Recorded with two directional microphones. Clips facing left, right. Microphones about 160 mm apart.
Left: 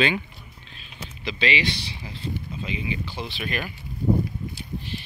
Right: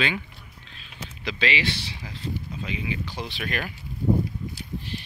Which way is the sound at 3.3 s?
15° left (ahead or behind).